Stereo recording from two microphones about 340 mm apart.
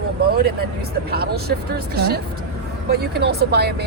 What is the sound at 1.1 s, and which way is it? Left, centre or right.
Speech, right.